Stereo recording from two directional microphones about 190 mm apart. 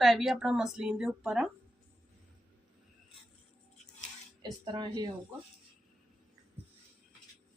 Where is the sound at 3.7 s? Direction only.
40° left (ahead or behind).